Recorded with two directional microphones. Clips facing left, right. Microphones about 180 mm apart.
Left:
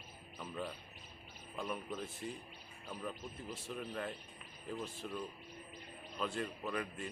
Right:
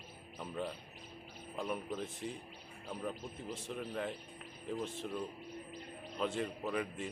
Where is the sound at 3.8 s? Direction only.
Centre (ahead or behind).